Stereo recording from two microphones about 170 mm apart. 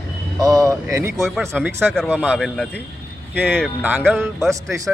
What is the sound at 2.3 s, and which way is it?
Speech, 5° left (ahead or behind).